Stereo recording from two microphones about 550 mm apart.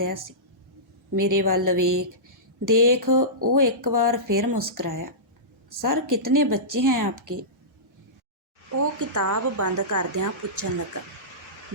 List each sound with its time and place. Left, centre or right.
0.0 s speech: right
8.8 s speech: right